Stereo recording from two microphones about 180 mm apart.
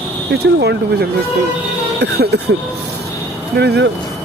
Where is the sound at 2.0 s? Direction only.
70° right (ahead or behind).